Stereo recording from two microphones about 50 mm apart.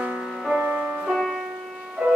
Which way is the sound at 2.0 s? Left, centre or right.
Centre.